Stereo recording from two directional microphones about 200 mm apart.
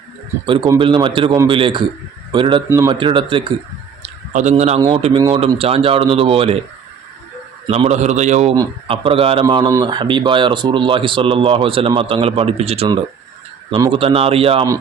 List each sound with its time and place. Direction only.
0.4 s speech: 25° right (ahead or behind)
4.0 s a sound: 35° right (ahead or behind)
4.8 s speech: 25° right (ahead or behind)
7.7 s a man's voice: 35° right (ahead or behind)